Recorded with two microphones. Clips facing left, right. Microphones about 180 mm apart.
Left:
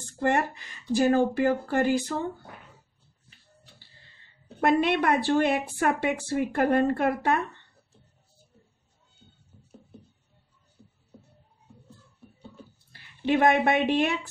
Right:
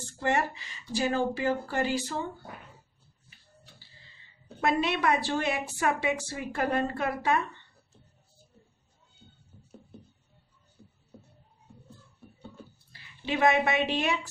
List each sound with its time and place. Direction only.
0.2 s a woman's voice: 50° left (ahead or behind)
4.6 s a woman's voice: 55° left (ahead or behind)
12.9 s a woman's voice: 55° left (ahead or behind)